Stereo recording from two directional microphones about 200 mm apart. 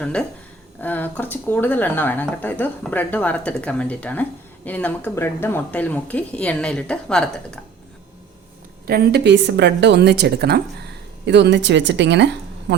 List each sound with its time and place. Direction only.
0.0 s speech: 5° left (ahead or behind)
8.9 s speech: 50° right (ahead or behind)